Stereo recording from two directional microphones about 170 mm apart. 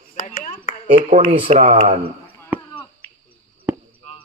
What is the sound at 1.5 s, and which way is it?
Speech, 45° right (ahead or behind).